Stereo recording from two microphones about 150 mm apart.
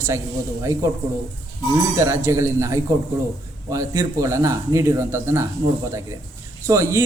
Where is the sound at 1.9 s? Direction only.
20° right (ahead or behind).